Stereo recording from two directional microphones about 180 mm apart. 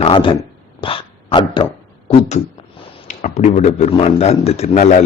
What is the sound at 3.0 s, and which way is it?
A man's voice, 45° left (ahead or behind).